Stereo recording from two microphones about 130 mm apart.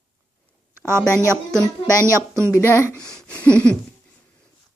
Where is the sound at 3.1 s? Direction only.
5° left (ahead or behind).